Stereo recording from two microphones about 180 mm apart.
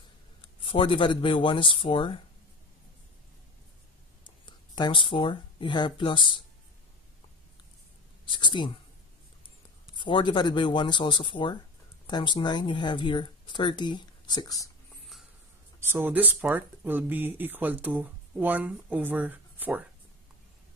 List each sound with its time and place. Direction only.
0.4 s speech: 30° left (ahead or behind)
4.5 s speech: 25° left (ahead or behind)
8.3 s speech: 25° left (ahead or behind)
9.9 s speech: 25° left (ahead or behind)
15.8 s speech: 10° right (ahead or behind)